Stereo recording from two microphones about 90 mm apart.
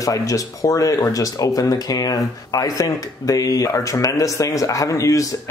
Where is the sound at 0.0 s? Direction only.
40° left (ahead or behind).